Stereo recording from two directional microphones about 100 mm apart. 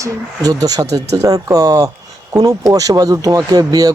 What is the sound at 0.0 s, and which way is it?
Speech, 40° right (ahead or behind).